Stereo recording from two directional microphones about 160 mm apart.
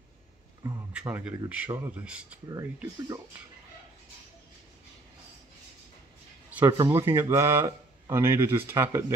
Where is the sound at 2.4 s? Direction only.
20° right (ahead or behind).